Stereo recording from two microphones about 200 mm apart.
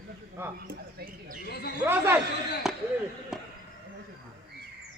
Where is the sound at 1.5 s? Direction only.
50° left (ahead or behind).